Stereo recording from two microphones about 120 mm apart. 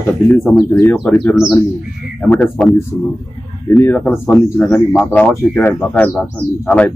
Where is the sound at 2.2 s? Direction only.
15° left (ahead or behind).